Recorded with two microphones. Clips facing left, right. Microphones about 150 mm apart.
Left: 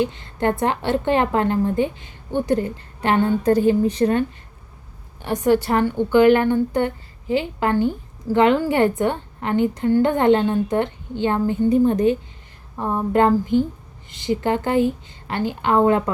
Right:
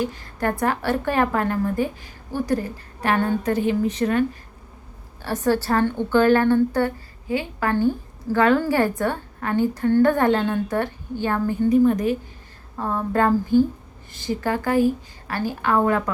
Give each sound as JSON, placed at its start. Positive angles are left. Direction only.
{"t": 0.0, "sound": "a woman's voice", "side_deg": 25}
{"t": 5.2, "sound": "a woman's voice", "side_deg": 20}